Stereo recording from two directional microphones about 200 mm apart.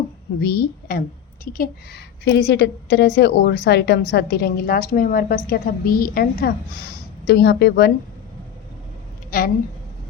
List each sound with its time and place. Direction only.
0.3 s a woman's voice: 55° left (ahead or behind)
9.3 s a woman's voice: 50° left (ahead or behind)